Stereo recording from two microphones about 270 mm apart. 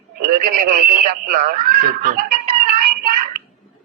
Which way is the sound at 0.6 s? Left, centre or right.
Right.